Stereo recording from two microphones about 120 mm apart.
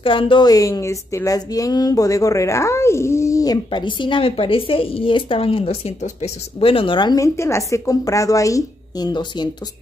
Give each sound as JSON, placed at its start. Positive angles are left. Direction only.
{"t": 0.0, "sound": "a woman's voice", "side_deg": 45}
{"t": 7.3, "sound": "a woman's voice", "side_deg": 25}